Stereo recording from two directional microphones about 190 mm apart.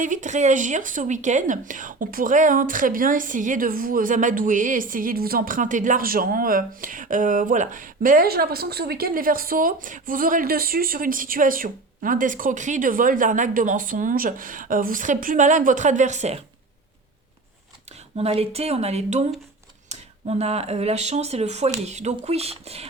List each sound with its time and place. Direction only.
0.0 s speech: 40° right (ahead or behind)
18.2 s speech: 30° right (ahead or behind)